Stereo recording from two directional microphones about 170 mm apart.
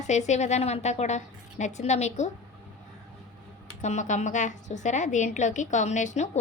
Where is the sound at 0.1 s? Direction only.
40° left (ahead or behind).